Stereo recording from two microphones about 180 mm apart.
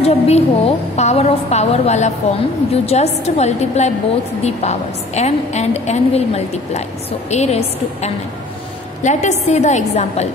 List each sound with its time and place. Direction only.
0.0 s a woman's voice: 35° left (ahead or behind)